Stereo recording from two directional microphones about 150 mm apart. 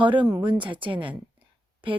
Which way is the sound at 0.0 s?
30° right (ahead or behind).